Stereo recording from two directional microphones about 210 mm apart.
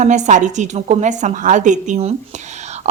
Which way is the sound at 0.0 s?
35° right (ahead or behind).